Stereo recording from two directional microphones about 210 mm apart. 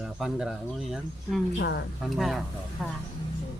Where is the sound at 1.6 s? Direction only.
55° left (ahead or behind).